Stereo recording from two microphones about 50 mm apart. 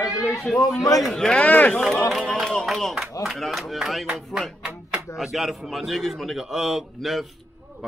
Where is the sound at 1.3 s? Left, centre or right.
Left.